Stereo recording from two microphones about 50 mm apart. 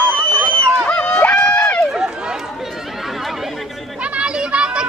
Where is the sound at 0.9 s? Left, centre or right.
Left.